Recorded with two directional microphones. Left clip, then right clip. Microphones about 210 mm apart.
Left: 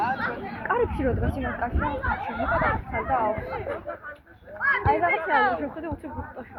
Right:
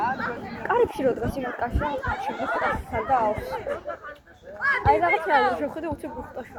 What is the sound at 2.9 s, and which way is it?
Speech, 55° right (ahead or behind).